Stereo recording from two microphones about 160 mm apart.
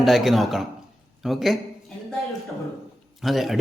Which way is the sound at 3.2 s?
Centre (ahead or behind).